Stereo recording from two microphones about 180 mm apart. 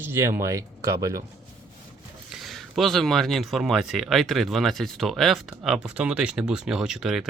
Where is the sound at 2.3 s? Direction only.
Centre (ahead or behind).